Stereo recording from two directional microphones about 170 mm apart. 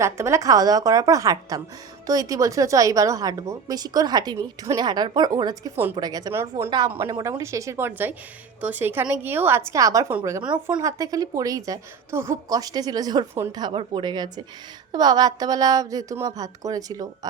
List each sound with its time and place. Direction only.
0.0 s a woman's voice: 15° right (ahead or behind)
6.0 s a woman's voice: 20° right (ahead or behind)
10.5 s a woman's voice: 25° right (ahead or behind)